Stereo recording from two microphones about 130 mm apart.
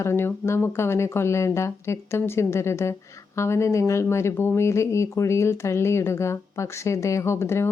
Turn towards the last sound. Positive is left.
turn(degrees=20)  # may be behind; listen again after turning